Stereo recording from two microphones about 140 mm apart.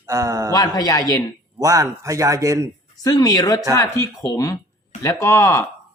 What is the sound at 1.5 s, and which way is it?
A man's voice, 25° right (ahead or behind).